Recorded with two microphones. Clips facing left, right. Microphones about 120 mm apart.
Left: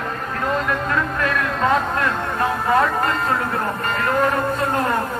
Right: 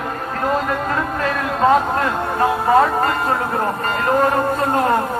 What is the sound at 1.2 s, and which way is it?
Speech, 30° right (ahead or behind).